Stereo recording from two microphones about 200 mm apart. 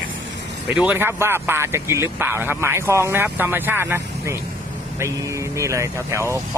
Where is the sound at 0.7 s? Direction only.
5° right (ahead or behind).